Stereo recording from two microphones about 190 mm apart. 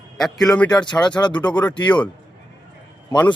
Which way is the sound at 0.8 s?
20° left (ahead or behind).